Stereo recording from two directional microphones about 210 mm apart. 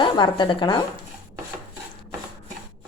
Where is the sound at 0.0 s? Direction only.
20° left (ahead or behind).